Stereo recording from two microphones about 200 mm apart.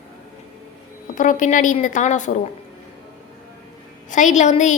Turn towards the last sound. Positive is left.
turn(degrees=35)  # may be behind; listen again after turning